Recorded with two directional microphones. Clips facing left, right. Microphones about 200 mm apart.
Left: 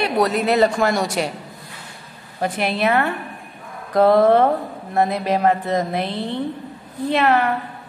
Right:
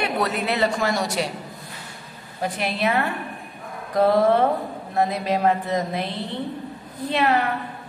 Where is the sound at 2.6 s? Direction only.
60° left (ahead or behind).